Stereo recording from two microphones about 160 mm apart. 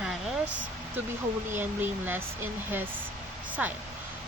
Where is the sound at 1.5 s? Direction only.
10° right (ahead or behind).